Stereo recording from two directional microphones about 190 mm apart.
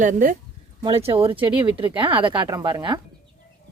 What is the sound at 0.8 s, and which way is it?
A woman's voice, 25° right (ahead or behind).